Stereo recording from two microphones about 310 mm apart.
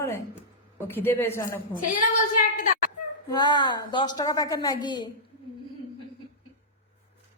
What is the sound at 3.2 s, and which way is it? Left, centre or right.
A woman's voice, centre.